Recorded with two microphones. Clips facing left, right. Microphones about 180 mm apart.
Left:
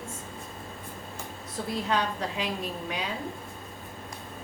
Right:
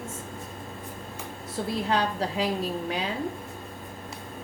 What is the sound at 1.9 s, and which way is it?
Speech, 35° right (ahead or behind).